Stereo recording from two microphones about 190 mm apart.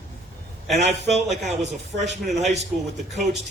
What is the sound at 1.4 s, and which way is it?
Speech, 35° right (ahead or behind).